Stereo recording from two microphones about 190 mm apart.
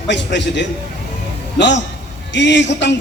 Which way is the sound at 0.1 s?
70° left (ahead or behind).